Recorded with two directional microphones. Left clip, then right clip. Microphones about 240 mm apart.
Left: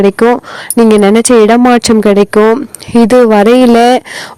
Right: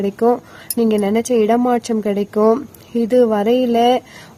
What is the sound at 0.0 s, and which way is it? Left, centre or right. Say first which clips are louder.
Speech: left 9 dB; left.